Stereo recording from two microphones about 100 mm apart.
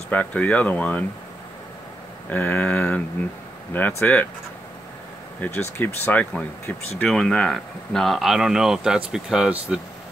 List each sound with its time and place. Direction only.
0.1 s speech: 15° left (ahead or behind)
2.3 s speech: 15° left (ahead or behind)
5.4 s speech: 20° left (ahead or behind); by 9.8 s 10° right (ahead or behind)